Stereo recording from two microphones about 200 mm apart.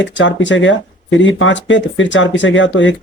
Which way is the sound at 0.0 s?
65° left (ahead or behind).